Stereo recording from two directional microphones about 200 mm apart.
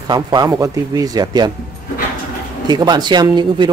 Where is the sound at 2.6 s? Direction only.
20° right (ahead or behind).